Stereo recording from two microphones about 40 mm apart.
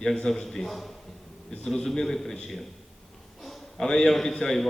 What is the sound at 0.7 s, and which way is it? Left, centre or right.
Speech, centre.